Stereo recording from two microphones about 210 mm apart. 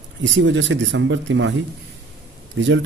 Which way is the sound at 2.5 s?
60° right (ahead or behind).